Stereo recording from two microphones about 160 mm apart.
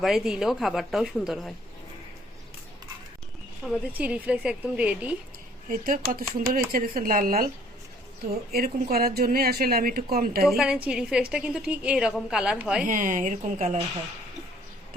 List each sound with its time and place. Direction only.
0.0 s a woman's voice: centre (ahead or behind)
3.7 s a woman's voice: 5° right (ahead or behind)
5.6 s speech: 60° right (ahead or behind)
8.5 s speech: 65° right (ahead or behind)
10.8 s a woman's voice: 5° right (ahead or behind)
12.8 s speech: 55° right (ahead or behind)